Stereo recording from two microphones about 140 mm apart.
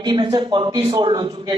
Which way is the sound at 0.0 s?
30° right (ahead or behind).